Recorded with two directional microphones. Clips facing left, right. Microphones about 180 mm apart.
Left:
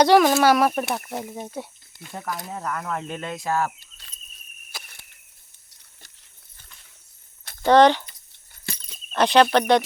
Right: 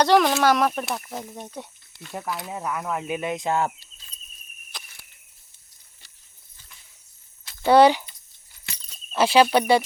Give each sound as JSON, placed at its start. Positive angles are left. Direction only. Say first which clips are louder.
{"t": 0.0, "sound": "speech", "louder": "left 2 dB", "side_deg": 10}
{"t": 2.5, "sound": "cricket", "louder": "right 1 dB", "side_deg": -10}
{"t": 3.8, "sound": "cricket", "louder": "left 2 dB", "side_deg": 70}
{"t": 4.7, "sound": "a sound", "louder": "left 1 dB", "side_deg": 5}
{"t": 7.6, "sound": "cricket", "louder": "even", "side_deg": -10}
{"t": 9.1, "sound": "speech", "louder": "even", "side_deg": -5}